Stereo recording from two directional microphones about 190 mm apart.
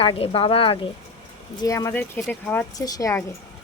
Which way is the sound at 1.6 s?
15° left (ahead or behind).